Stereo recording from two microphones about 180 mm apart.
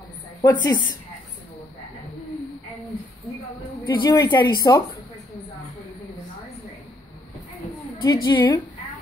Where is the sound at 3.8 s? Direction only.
25° left (ahead or behind).